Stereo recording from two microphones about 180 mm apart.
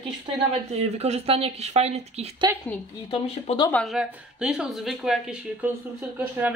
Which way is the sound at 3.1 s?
25° left (ahead or behind).